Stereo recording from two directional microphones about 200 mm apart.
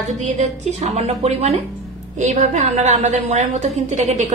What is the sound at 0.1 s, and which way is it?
A woman's voice, 35° right (ahead or behind).